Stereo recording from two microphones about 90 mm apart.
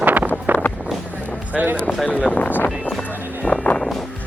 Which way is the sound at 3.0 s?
15° left (ahead or behind).